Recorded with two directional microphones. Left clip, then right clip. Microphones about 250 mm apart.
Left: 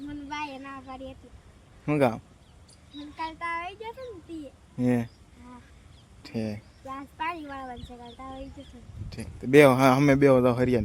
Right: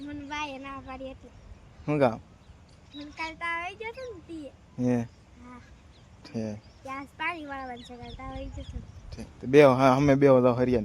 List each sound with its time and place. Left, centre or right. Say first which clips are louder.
0.0 s a sound: even; centre
1.9 s a man's voice: even; centre
4.8 s a man's voice: left 1 dB; centre
6.2 s a man's voice: left 2 dB; centre
6.8 s a man's voice: even; centre